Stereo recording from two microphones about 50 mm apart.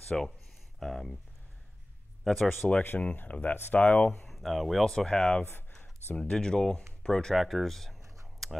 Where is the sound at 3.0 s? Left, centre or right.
Left.